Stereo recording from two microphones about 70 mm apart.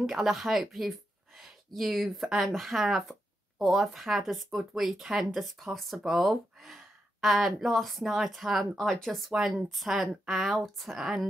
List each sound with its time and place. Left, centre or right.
0.0 s speech: centre
9.3 s speech: centre